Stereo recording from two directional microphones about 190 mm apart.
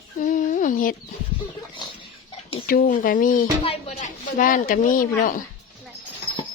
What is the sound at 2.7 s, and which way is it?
Speech, 50° left (ahead or behind).